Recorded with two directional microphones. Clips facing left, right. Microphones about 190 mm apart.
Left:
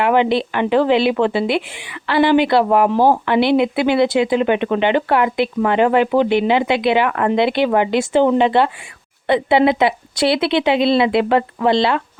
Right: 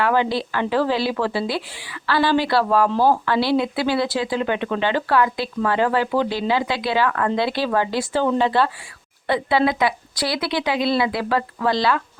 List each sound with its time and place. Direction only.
0.0 s a woman's voice: 20° left (ahead or behind)